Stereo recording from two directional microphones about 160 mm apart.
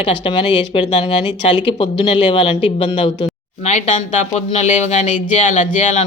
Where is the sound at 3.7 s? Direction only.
50° left (ahead or behind).